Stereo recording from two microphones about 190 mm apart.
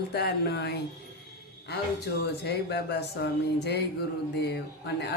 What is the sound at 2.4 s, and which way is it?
Speech, 60° left (ahead or behind).